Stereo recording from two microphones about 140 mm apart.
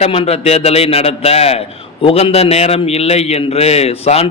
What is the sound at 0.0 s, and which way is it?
A man's voice, 45° left (ahead or behind).